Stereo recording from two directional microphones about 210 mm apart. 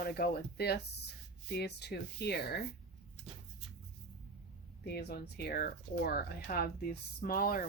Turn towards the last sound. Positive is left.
turn(degrees=45)  # may be behind; listen again after turning